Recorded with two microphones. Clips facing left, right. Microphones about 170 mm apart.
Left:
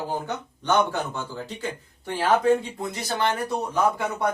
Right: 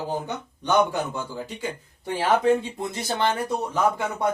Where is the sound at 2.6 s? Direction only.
25° right (ahead or behind).